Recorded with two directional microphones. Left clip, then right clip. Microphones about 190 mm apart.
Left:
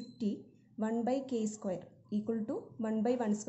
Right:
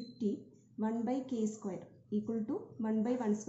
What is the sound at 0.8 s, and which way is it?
A woman's voice, 45° left (ahead or behind).